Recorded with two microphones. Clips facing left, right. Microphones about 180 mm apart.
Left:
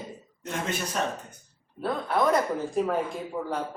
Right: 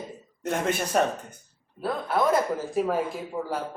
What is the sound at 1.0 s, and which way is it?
Speech, 60° right (ahead or behind).